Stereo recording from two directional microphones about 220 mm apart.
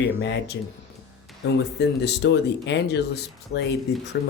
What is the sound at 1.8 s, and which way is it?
Speech, 50° left (ahead or behind).